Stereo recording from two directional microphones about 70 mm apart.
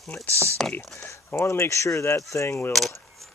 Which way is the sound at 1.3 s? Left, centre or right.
Left.